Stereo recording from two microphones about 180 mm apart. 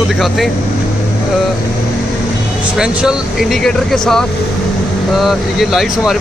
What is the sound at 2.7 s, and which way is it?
Speech, 5° right (ahead or behind).